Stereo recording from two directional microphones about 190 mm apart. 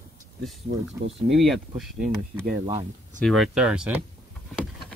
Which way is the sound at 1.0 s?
30° right (ahead or behind).